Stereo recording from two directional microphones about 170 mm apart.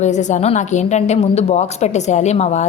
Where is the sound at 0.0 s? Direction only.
45° left (ahead or behind).